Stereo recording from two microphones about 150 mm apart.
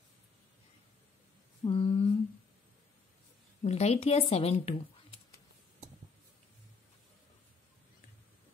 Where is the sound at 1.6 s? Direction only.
35° left (ahead or behind).